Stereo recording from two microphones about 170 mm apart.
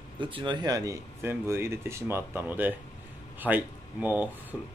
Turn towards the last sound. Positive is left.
turn(degrees=-10)  # may be behind; listen again after turning